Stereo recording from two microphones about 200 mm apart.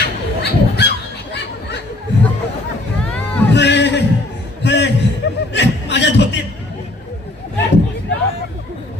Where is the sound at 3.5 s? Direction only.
60° left (ahead or behind).